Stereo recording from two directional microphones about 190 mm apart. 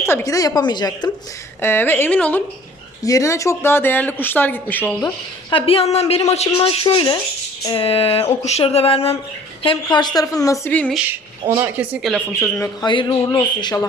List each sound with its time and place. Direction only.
0.0 s a woman's voice: 15° left (ahead or behind)
1.6 s speech: 10° left (ahead or behind)
5.0 s a woman's voice: 25° left (ahead or behind); by 10.9 s 10° left (ahead or behind)
10.9 s speech: 10° right (ahead or behind)
12.4 s speech: 15° left (ahead or behind)
12.9 s a woman's voice: 25° left (ahead or behind)